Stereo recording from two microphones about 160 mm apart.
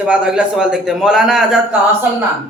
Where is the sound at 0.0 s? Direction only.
5° right (ahead or behind).